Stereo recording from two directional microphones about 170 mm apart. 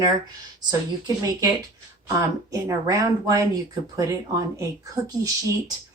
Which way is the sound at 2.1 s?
20° right (ahead or behind).